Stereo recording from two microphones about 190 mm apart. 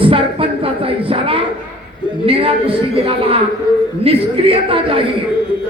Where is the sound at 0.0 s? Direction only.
30° right (ahead or behind).